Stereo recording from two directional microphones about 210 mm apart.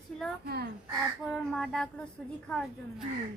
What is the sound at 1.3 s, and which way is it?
Speech, centre (ahead or behind).